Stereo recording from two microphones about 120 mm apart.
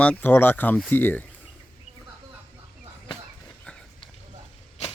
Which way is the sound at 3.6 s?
10° left (ahead or behind).